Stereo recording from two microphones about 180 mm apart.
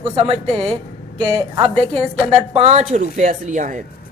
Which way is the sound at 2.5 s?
35° right (ahead or behind).